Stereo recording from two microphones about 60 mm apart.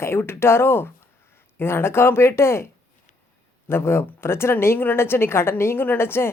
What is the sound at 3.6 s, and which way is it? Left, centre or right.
A woman's voice, left.